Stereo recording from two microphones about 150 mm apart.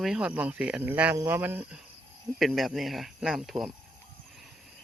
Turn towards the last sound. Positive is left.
turn(degrees=0)  # may be behind; listen again after turning